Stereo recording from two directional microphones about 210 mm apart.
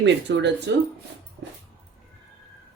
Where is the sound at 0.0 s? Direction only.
55° right (ahead or behind).